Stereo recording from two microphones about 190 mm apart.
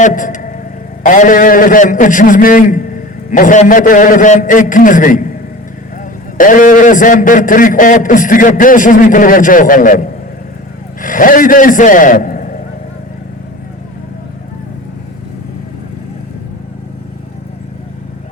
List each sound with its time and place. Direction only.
0.0 s a man's voice: 45° left (ahead or behind)
6.3 s a man's voice: 45° left (ahead or behind)
11.0 s a man's voice: 45° left (ahead or behind)